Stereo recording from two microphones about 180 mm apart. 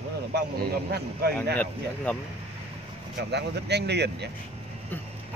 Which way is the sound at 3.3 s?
70° right (ahead or behind).